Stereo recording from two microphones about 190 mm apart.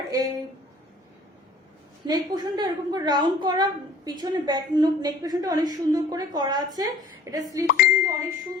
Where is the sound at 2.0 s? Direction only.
20° right (ahead or behind).